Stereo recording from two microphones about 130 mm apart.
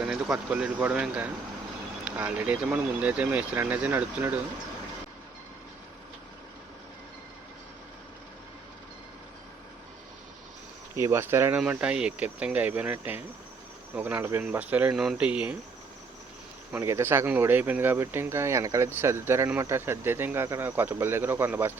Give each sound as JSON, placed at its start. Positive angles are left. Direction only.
{"t": 0.0, "sound": "speech", "side_deg": -5}
{"t": 10.9, "sound": "speech", "side_deg": -20}
{"t": 16.7, "sound": "speech", "side_deg": -20}